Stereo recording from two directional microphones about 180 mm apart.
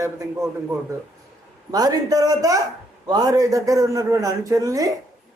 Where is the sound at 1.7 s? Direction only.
20° right (ahead or behind).